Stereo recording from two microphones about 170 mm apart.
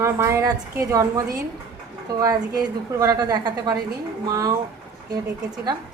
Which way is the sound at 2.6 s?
20° right (ahead or behind).